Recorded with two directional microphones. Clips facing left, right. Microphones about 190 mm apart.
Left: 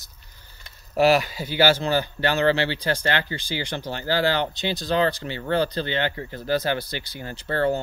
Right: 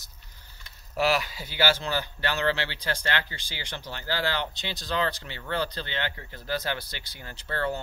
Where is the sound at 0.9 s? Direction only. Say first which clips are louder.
Left 7 dB; 50° left (ahead or behind).